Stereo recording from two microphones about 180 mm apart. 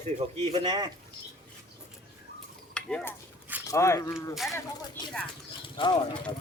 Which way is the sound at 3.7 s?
15° left (ahead or behind).